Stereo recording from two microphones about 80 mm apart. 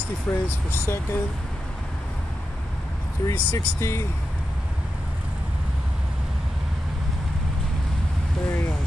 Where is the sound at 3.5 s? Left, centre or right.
Left.